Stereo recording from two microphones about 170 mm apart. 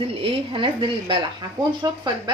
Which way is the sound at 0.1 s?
30° right (ahead or behind).